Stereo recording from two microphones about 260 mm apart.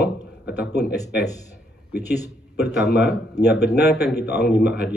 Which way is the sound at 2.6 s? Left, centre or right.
Left.